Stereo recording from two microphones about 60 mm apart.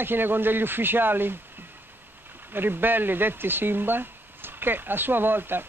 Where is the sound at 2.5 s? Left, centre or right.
Right.